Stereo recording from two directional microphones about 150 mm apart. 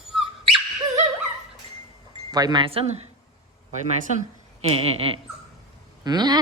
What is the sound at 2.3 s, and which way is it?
Cough, 30° right (ahead or behind).